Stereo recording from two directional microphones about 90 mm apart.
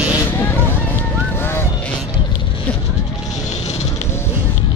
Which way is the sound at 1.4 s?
30° left (ahead or behind).